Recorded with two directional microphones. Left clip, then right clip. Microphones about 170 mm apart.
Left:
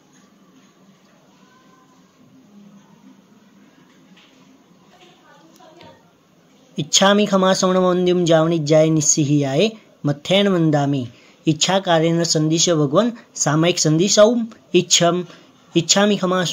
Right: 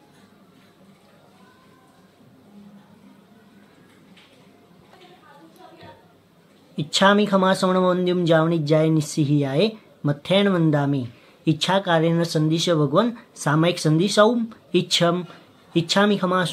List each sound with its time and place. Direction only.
6.7 s speech: 20° left (ahead or behind)